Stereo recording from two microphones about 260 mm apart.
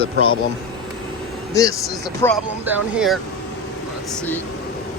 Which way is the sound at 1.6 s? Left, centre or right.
Centre.